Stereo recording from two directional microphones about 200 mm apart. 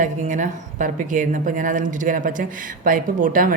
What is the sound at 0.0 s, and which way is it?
Speech, 40° right (ahead or behind).